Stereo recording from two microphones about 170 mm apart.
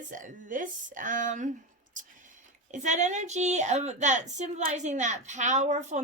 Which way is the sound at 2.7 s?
45° right (ahead or behind).